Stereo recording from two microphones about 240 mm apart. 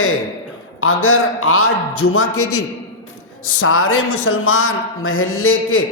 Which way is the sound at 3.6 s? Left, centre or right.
Left.